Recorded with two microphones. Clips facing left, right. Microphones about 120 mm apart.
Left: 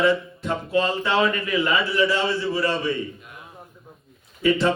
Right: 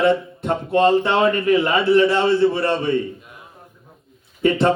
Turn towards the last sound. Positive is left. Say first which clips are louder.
# right 3 dB
turn(degrees=-50)  # may be behind; listen again after turning